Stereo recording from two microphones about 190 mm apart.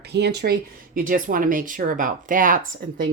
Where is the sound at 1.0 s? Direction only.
45° right (ahead or behind).